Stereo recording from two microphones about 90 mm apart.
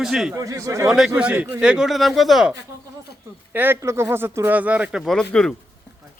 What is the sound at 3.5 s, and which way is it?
Speech, 20° right (ahead or behind).